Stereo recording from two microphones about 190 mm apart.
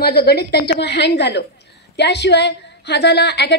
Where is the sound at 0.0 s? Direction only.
55° left (ahead or behind).